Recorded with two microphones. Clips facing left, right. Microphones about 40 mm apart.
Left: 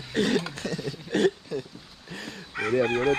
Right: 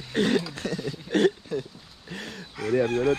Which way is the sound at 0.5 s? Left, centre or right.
Left.